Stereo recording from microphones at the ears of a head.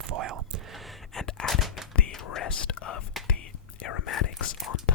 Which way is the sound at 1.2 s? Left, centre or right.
Left.